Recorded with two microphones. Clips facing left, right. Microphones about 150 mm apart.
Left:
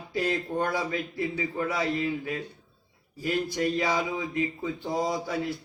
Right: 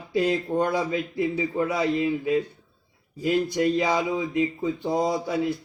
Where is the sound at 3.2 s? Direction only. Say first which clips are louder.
Right 5 dB; 20° right (ahead or behind).